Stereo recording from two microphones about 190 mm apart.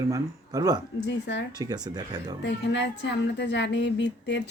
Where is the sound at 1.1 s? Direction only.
70° left (ahead or behind).